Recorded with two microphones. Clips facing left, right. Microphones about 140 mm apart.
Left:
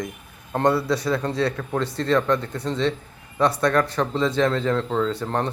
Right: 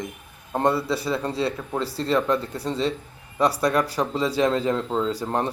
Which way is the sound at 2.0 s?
10° right (ahead or behind).